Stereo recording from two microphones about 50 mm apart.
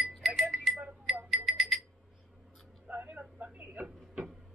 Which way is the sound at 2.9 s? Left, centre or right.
Right.